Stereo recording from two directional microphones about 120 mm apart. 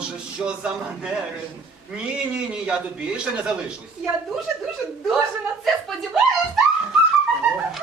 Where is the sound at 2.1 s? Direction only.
10° right (ahead or behind).